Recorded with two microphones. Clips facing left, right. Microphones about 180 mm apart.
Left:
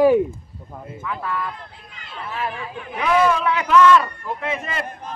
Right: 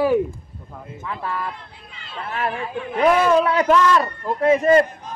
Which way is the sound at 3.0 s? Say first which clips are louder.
Right 3 dB; 35° right (ahead or behind).